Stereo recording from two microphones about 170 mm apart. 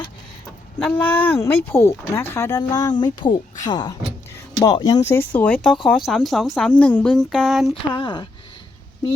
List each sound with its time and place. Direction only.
0.8 s speech: 5° left (ahead or behind)
7.9 s speech: 30° left (ahead or behind)